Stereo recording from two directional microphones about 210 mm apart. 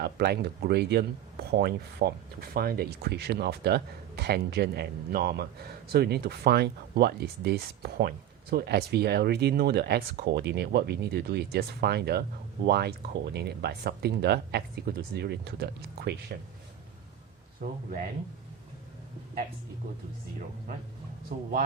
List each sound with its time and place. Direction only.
0.0 s speech: 50° right (ahead or behind)